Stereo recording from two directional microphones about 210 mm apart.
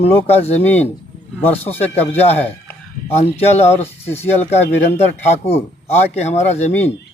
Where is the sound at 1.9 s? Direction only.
30° left (ahead or behind).